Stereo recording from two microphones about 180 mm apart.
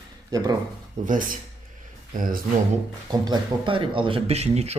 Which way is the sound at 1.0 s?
45° right (ahead or behind).